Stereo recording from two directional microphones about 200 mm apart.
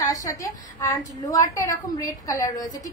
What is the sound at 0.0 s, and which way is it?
A woman's voice, 15° left (ahead or behind).